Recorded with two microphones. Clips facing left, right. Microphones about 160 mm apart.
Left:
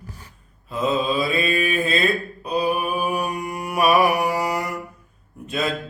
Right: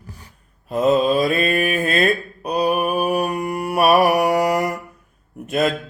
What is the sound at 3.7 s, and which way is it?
Mantra, 60° right (ahead or behind).